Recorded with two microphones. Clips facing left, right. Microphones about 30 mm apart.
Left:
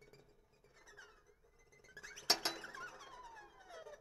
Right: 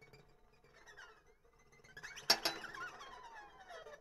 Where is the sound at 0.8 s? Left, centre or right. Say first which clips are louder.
Right 2 dB; centre.